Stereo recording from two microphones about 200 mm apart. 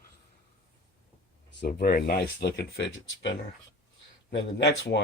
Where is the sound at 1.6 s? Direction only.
50° left (ahead or behind).